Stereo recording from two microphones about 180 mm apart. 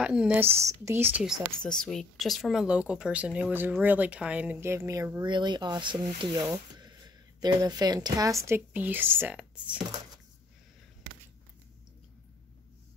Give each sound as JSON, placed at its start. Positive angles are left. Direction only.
{"t": 0.0, "sound": "a woman's voice", "side_deg": -5}